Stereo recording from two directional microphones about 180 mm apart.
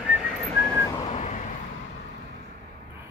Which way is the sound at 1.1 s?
40° left (ahead or behind).